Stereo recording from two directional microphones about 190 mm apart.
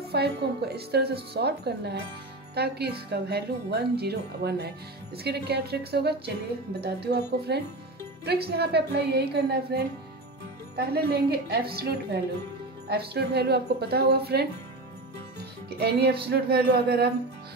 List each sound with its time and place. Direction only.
0.1 s speech: 60° right (ahead or behind)
15.8 s speech: 55° right (ahead or behind)